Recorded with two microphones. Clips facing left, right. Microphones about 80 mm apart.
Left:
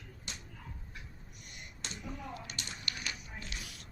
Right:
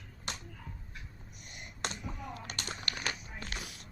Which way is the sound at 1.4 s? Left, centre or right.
Right.